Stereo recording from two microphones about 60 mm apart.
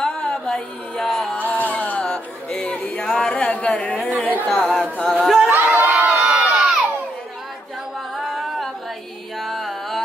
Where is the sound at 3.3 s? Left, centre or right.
Centre.